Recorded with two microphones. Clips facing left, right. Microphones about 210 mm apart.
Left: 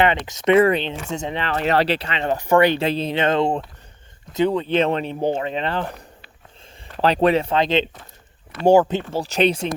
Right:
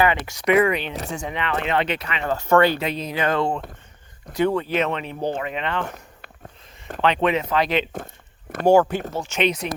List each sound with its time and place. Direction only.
0.3 s speech: 25° left (ahead or behind)
2.3 s speech: 15° left (ahead or behind)
2.7 s speech: 30° left (ahead or behind)
6.2 s a sound: 50° right (ahead or behind)
7.0 s speech: 35° left (ahead or behind)